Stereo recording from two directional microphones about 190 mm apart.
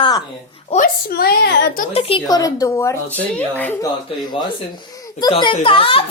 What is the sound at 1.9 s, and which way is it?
Speech, 30° left (ahead or behind).